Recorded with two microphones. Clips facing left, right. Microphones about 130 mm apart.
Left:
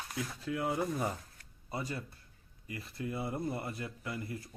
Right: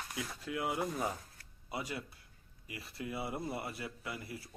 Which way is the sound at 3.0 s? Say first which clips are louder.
Left 3 dB; 10° right (ahead or behind).